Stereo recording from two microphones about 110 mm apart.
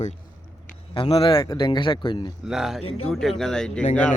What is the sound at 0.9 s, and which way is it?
Speech, 55° left (ahead or behind).